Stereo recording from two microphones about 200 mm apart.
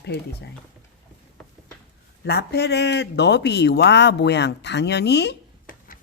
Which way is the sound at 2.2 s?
55° left (ahead or behind).